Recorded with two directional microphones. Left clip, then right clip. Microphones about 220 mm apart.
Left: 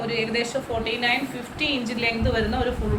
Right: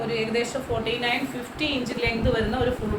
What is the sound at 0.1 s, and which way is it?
Speech, 10° right (ahead or behind).